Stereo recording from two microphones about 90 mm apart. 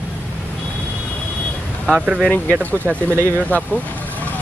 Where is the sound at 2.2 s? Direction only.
15° left (ahead or behind).